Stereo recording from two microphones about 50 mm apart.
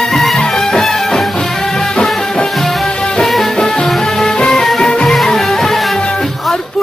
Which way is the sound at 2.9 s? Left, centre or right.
Centre.